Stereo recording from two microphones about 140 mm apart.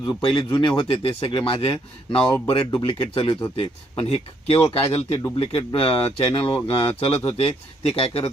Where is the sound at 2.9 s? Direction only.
40° left (ahead or behind).